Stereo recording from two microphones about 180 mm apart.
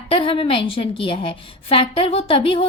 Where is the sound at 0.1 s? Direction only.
30° left (ahead or behind).